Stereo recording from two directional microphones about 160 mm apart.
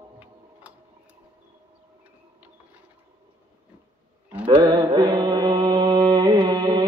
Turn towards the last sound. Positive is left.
turn(degrees=-25)  # may be behind; listen again after turning